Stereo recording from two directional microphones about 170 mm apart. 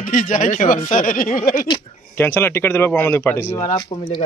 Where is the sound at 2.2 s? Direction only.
15° left (ahead or behind).